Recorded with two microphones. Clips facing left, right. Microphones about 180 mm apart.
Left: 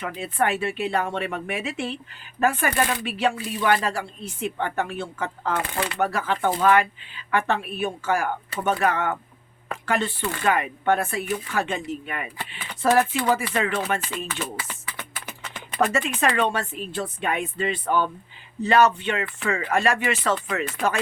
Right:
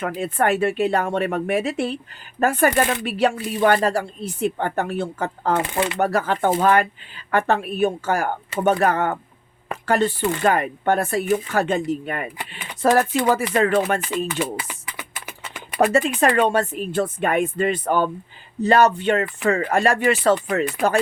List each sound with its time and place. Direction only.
0.0 s speech: 45° right (ahead or behind)
14.3 s a sound: 10° right (ahead or behind)
15.8 s speech: 35° right (ahead or behind)